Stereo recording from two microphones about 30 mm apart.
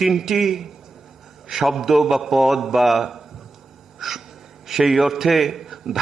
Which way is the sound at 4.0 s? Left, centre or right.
Centre.